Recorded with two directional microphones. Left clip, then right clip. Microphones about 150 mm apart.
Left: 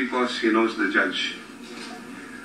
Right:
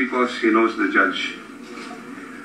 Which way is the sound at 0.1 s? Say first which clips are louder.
Right 2 dB; 15° left (ahead or behind).